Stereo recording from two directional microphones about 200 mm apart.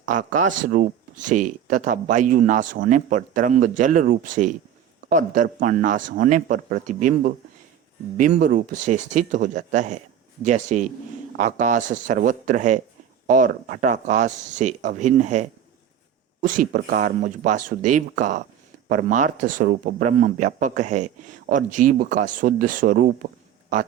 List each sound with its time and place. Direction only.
0.0 s speech: 40° right (ahead or behind)